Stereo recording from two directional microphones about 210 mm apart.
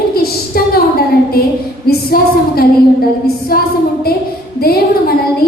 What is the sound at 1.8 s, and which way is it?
Speech, 45° left (ahead or behind).